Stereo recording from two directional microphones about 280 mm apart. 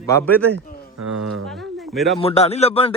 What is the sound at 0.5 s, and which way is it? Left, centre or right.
Speech, right.